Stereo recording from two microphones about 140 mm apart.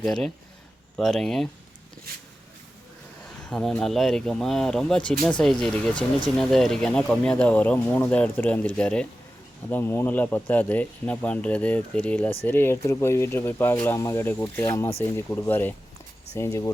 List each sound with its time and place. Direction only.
0.0 s speech: 5° left (ahead or behind)
3.2 s speech: 5° left (ahead or behind); by 16.7 s 20° left (ahead or behind)